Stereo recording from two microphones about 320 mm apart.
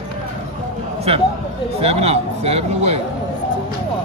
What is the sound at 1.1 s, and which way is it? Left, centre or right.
Speech, centre.